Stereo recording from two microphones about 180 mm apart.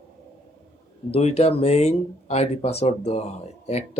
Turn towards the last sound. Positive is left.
turn(degrees=35)  # may be behind; listen again after turning